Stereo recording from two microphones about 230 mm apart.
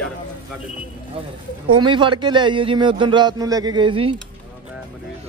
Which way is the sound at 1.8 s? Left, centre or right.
Right.